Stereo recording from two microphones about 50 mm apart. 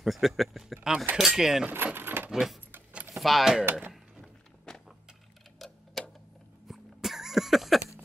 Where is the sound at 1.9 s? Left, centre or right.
Right.